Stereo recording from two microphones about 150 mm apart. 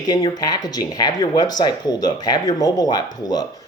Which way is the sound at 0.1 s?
25° left (ahead or behind).